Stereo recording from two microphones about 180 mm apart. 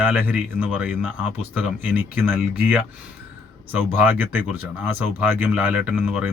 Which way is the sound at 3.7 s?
10° right (ahead or behind).